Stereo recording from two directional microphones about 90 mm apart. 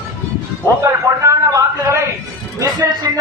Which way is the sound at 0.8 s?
35° right (ahead or behind).